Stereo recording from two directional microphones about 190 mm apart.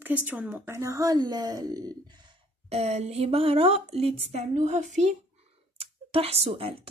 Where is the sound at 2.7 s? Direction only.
35° right (ahead or behind).